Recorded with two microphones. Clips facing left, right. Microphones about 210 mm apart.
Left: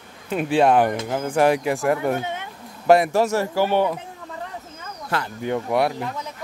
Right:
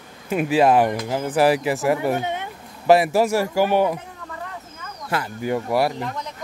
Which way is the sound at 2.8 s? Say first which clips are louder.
Even; 5° right (ahead or behind).